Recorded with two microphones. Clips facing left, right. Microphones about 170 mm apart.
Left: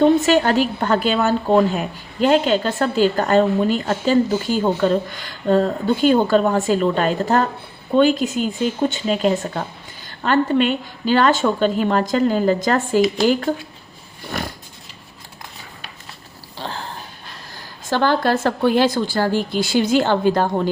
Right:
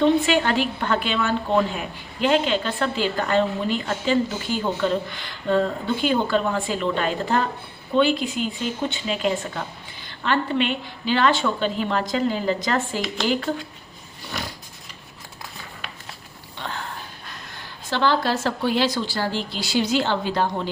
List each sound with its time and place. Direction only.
0.0 s a woman's voice: 40° left (ahead or behind)
14.3 s a woman's voice: 50° left (ahead or behind)
16.6 s a sound: 30° left (ahead or behind)
17.8 s a woman's voice: 50° left (ahead or behind)